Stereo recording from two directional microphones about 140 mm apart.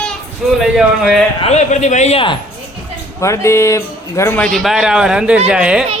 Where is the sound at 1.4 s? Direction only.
50° left (ahead or behind).